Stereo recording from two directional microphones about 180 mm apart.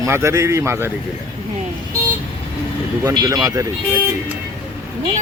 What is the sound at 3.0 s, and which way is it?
Speech, 20° right (ahead or behind).